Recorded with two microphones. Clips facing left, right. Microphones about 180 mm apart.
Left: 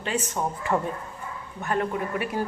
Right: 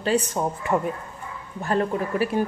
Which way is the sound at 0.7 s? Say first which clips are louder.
Right 2 dB; 10° right (ahead or behind).